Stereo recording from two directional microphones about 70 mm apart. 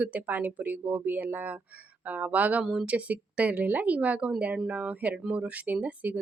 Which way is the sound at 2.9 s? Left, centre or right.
Right.